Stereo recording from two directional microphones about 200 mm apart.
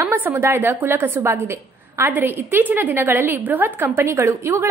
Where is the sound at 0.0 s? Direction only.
10° right (ahead or behind).